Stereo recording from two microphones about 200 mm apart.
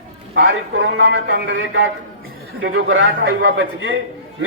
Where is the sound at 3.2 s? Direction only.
55° right (ahead or behind).